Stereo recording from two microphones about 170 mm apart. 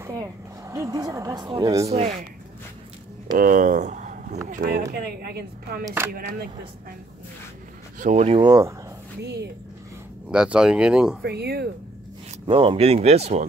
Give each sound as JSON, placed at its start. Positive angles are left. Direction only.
{"t": 0.0, "sound": "speech", "side_deg": -20}
{"t": 1.9, "sound": "speech", "side_deg": -40}
{"t": 3.3, "sound": "speech", "side_deg": -50}
{"t": 4.9, "sound": "speech", "side_deg": -65}
{"t": 8.0, "sound": "speech", "side_deg": -45}
{"t": 8.4, "sound": "speech", "side_deg": -20}
{"t": 9.2, "sound": "speech", "side_deg": -80}
{"t": 10.3, "sound": "speech", "side_deg": -5}
{"t": 11.2, "sound": "speech", "side_deg": -70}
{"t": 12.4, "sound": "speech", "side_deg": -35}